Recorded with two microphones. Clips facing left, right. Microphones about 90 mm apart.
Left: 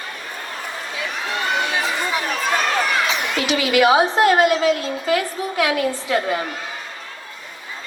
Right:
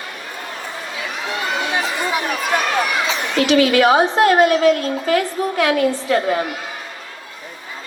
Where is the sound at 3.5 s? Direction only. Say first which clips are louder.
Right 2 dB; 5° left (ahead or behind).